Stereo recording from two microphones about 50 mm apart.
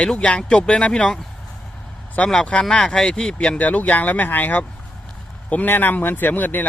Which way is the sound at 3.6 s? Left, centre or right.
Left.